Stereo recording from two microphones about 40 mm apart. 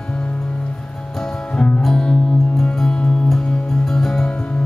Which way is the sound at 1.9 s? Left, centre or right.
Centre.